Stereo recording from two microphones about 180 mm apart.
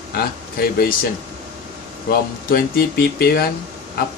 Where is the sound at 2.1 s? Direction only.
60° left (ahead or behind).